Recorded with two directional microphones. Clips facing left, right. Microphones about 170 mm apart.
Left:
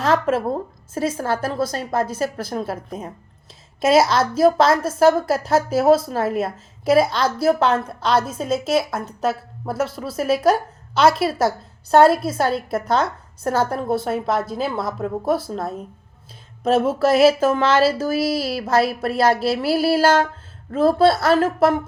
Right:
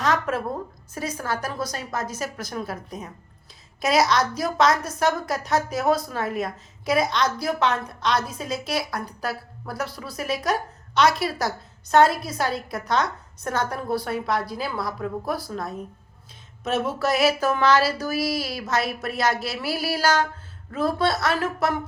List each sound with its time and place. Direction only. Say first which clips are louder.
0.0 s a woman's voice: left 5 dB; 30° left (ahead or behind)